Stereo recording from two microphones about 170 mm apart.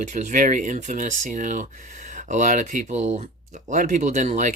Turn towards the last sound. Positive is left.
turn(degrees=-45)  # may be behind; listen again after turning